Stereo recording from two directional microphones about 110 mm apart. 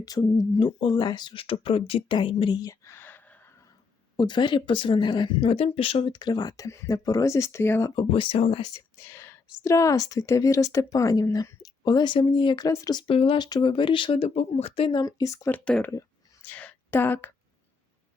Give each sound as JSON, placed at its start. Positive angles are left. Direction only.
{"t": 0.0, "sound": "speech", "side_deg": 35}
{"t": 0.5, "sound": "speech", "side_deg": 45}
{"t": 4.2, "sound": "speech", "side_deg": 45}
{"t": 5.5, "sound": "speech", "side_deg": 65}
{"t": 6.1, "sound": "speech", "side_deg": 45}
{"t": 7.9, "sound": "speech", "side_deg": 55}
{"t": 9.0, "sound": "whispering", "side_deg": 20}
{"t": 9.6, "sound": "speech", "side_deg": 30}
{"t": 12.6, "sound": "speech", "side_deg": 35}
{"t": 13.1, "sound": "speech", "side_deg": 55}
{"t": 13.4, "sound": "speech", "side_deg": 45}
{"t": 14.9, "sound": "speech", "side_deg": 30}
{"t": 15.5, "sound": "speech", "side_deg": 10}
{"t": 15.9, "sound": "a sound", "side_deg": 20}